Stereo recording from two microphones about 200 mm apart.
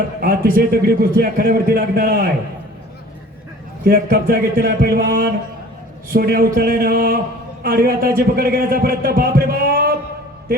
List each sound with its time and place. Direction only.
0.2 s a man's voice: 45° right (ahead or behind)
3.8 s a man's voice: 45° right (ahead or behind)